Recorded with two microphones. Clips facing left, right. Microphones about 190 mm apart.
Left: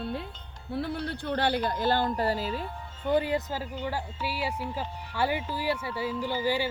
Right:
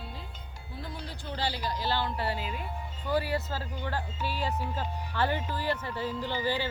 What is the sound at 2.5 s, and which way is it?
Speech, 10° right (ahead or behind).